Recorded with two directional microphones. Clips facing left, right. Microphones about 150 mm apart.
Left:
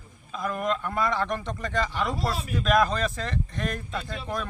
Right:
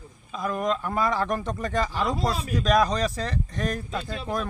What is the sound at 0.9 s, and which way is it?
Speech, 40° right (ahead or behind).